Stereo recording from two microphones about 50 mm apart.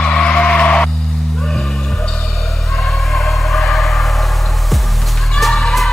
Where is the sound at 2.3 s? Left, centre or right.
Centre.